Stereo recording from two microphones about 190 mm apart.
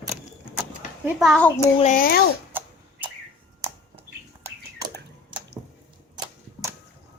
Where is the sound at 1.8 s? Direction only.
45° left (ahead or behind).